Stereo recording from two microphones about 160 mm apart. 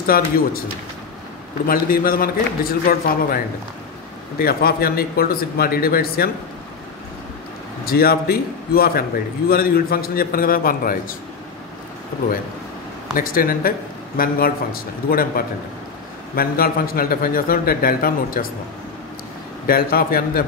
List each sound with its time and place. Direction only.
0.0 s a man's voice: 65° left (ahead or behind)
1.7 s a man's voice: 65° left (ahead or behind)
4.4 s a man's voice: 70° left (ahead or behind)
7.8 s a man's voice: 70° left (ahead or behind)
13.1 s a man's voice: 65° left (ahead or behind)
19.6 s a man's voice: 65° left (ahead or behind)